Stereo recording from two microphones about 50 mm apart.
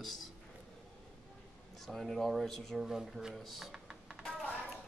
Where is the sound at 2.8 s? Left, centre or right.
Centre.